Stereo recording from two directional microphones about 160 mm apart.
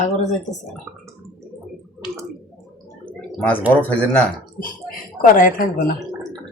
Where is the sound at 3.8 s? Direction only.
10° left (ahead or behind).